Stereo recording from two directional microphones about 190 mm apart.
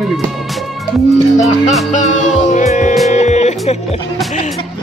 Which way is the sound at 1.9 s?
40° left (ahead or behind).